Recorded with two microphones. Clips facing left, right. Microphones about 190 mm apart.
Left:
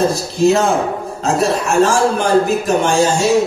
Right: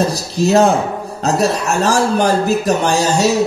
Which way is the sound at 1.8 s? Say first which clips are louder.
Left 1 dB; 40° right (ahead or behind).